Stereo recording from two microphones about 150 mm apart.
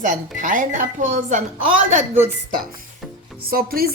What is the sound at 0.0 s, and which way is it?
Speech, 60° right (ahead or behind).